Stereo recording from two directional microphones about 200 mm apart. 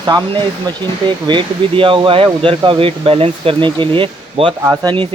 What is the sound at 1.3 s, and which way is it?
Speech, 25° right (ahead or behind).